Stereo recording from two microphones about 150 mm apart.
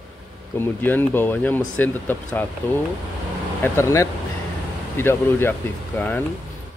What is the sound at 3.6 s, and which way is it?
Speech, 20° left (ahead or behind).